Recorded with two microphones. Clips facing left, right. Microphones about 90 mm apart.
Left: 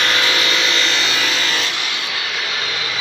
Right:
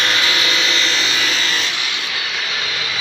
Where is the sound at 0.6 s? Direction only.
65° left (ahead or behind).